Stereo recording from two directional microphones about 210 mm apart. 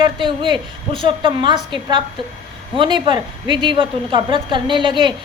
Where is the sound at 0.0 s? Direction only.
25° right (ahead or behind).